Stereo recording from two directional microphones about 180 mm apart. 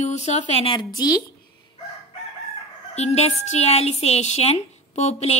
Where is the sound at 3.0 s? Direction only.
35° left (ahead or behind).